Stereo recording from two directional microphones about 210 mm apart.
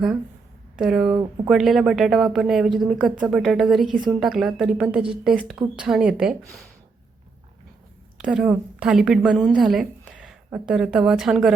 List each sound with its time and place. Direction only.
0.8 s a woman's voice: centre (ahead or behind)
8.2 s a woman's voice: 5° right (ahead or behind)